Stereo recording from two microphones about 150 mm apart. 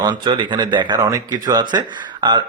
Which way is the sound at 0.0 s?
30° right (ahead or behind).